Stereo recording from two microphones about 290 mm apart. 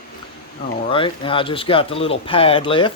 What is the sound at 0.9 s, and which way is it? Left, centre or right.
Speech, centre.